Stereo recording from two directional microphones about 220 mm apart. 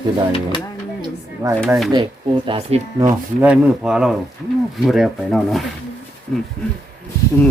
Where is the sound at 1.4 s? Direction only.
15° right (ahead or behind).